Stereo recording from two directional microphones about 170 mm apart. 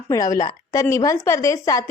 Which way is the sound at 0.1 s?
20° left (ahead or behind).